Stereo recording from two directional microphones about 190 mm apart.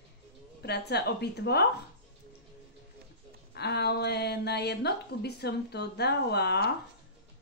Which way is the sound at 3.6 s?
60° left (ahead or behind).